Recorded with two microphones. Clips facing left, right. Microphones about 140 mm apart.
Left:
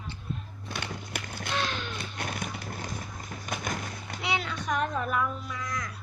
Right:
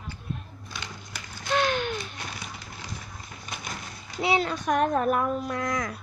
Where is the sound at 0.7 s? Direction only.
60° left (ahead or behind).